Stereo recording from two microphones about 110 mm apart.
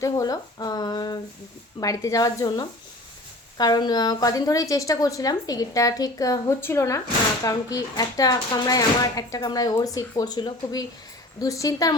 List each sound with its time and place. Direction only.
0.0 s speech: 35° left (ahead or behind)
6.6 s speech: 25° left (ahead or behind)